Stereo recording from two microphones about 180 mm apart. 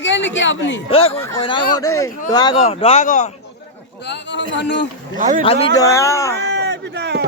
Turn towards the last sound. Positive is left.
turn(degrees=-70)  # may be behind; listen again after turning